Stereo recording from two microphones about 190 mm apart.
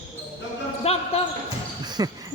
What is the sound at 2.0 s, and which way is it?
Speech, 20° right (ahead or behind).